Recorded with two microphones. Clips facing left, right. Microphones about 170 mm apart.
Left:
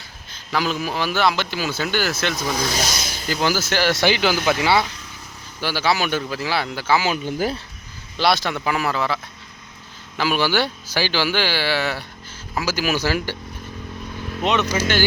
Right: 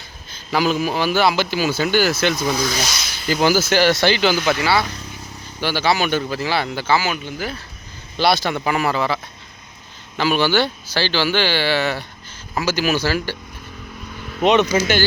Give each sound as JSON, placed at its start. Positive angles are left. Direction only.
{"t": 0.5, "sound": "speech", "side_deg": -5}
{"t": 2.9, "sound": "speech", "side_deg": 45}
{"t": 3.2, "sound": "speech", "side_deg": -5}
{"t": 4.0, "sound": "speech", "side_deg": 10}
{"t": 4.5, "sound": "speech", "side_deg": 20}
{"t": 5.5, "sound": "speech", "side_deg": 0}
{"t": 7.3, "sound": "speech", "side_deg": 45}
{"t": 8.2, "sound": "speech", "side_deg": 0}
{"t": 14.4, "sound": "speech", "side_deg": -20}